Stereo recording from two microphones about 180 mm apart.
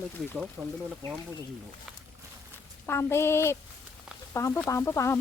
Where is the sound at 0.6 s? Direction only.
15° right (ahead or behind).